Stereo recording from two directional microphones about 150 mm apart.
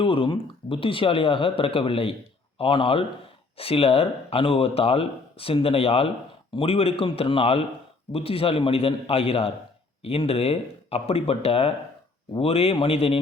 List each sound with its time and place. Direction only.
0.0 s speech: 35° left (ahead or behind)